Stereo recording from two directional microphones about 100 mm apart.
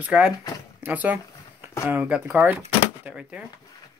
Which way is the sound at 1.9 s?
15° right (ahead or behind).